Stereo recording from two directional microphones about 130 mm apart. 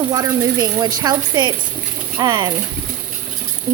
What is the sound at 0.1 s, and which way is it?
A woman's voice, 25° right (ahead or behind).